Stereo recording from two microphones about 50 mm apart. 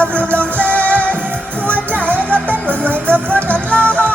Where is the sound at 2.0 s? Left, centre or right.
Left.